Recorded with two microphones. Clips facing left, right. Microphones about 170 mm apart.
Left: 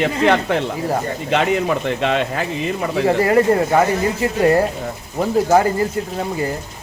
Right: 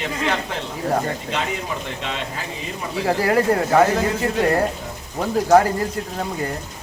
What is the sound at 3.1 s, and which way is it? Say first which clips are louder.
Speech: left 3 dB; centre (ahead or behind).